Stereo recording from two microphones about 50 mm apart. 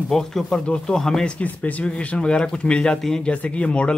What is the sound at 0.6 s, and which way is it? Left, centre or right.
Speech, left.